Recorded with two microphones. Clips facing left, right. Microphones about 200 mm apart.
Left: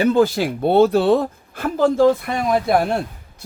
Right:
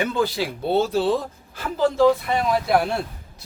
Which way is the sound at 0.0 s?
45° left (ahead or behind).